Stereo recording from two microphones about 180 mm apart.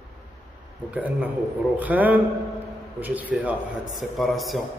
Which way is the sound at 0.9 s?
10° right (ahead or behind).